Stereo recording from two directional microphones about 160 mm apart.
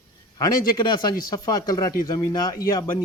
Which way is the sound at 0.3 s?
25° left (ahead or behind).